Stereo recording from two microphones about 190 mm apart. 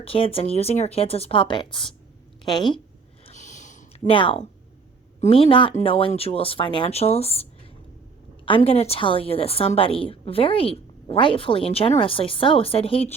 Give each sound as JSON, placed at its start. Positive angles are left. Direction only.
{"t": 0.0, "sound": "a woman's voice", "side_deg": 30}
{"t": 3.2, "sound": "a sound", "side_deg": 40}
{"t": 4.1, "sound": "a woman's voice", "side_deg": 25}
{"t": 8.4, "sound": "a woman's voice", "side_deg": 30}